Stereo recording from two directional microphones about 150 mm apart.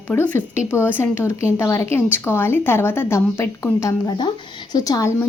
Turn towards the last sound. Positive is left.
turn(degrees=20)  # may be behind; listen again after turning